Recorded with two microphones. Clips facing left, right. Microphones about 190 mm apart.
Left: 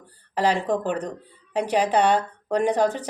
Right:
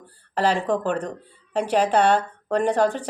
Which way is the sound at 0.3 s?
15° left (ahead or behind).